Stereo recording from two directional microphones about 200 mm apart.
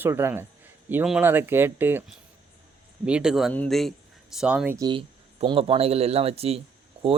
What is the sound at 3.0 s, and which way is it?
Speech, 5° right (ahead or behind).